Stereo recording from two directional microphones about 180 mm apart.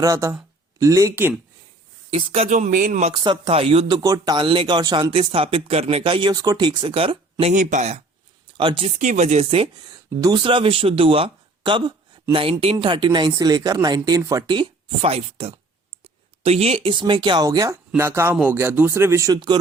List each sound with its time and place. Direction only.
0.0 s speech: 15° right (ahead or behind)
2.1 s speech: 30° right (ahead or behind)
3.2 s speech: 30° right (ahead or behind)
7.5 s speech: 45° right (ahead or behind)
8.5 s speech: 30° right (ahead or behind)
8.9 s speech: 45° right (ahead or behind); by 19.5 s 20° right (ahead or behind)